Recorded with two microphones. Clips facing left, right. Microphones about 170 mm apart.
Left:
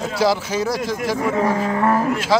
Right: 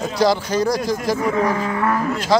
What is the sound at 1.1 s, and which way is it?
Speech, 25° left (ahead or behind).